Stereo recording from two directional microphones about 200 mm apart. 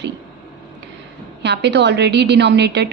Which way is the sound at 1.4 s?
60° right (ahead or behind).